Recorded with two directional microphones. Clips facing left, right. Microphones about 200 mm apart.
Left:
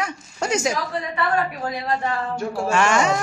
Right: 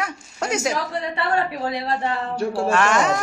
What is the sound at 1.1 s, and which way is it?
A woman's voice, 30° right (ahead or behind).